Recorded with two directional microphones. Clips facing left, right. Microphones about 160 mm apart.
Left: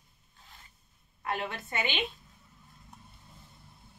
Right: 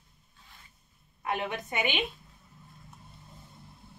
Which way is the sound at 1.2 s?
15° right (ahead or behind).